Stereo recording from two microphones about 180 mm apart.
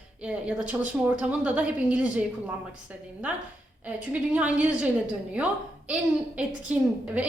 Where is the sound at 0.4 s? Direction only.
5° right (ahead or behind).